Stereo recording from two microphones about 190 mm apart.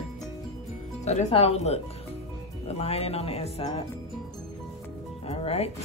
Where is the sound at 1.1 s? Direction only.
35° left (ahead or behind).